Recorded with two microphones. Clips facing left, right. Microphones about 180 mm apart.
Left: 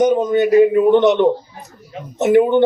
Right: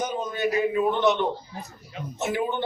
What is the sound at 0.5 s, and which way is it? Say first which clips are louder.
Speech: left 13 dB; 55° left (ahead or behind).